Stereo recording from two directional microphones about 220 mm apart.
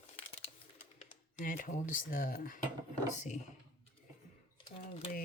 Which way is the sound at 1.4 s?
35° left (ahead or behind).